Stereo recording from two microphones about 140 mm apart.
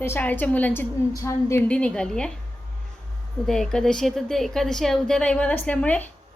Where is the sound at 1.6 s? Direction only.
10° left (ahead or behind).